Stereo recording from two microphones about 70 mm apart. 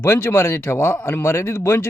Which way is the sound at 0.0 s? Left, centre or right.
Left.